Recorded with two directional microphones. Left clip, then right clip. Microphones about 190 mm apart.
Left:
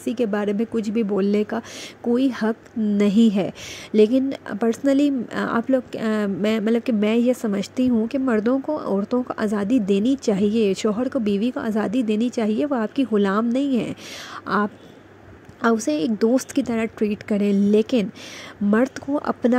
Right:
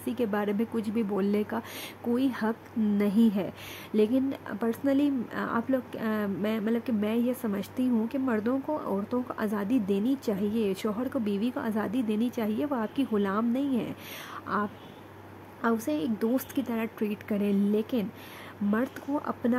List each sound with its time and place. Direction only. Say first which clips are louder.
0.0 s a woman's voice: left 7 dB; 20° left (ahead or behind)